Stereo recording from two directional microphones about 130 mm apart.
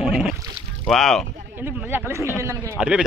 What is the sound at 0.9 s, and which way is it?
Speech, centre (ahead or behind).